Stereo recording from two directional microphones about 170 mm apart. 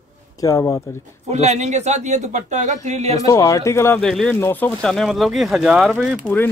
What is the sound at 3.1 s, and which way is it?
Speech, 20° left (ahead or behind).